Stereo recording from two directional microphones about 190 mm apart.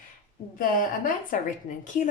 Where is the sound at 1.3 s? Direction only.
40° left (ahead or behind).